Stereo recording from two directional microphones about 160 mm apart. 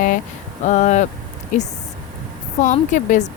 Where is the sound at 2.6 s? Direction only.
50° left (ahead or behind).